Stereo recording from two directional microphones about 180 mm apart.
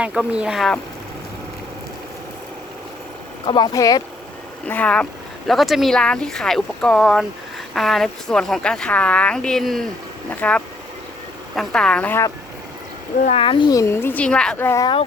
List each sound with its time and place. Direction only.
0.0 s speech: 5° right (ahead or behind)
3.4 s speech: 25° left (ahead or behind)
4.6 s speech: 5° left (ahead or behind)
13.2 s speech: 30° left (ahead or behind); by 14.8 s 15° left (ahead or behind)